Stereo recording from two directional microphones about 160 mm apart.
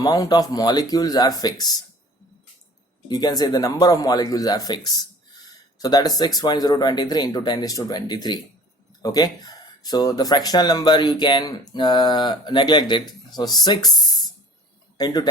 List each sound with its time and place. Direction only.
0.0 s speech: 25° left (ahead or behind)
3.1 s speech: 25° left (ahead or behind)